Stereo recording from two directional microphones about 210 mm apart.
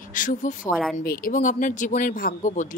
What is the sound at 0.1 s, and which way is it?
Speech, 40° left (ahead or behind).